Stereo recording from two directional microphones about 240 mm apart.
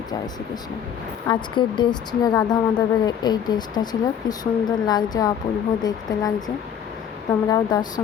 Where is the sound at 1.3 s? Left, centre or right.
Centre.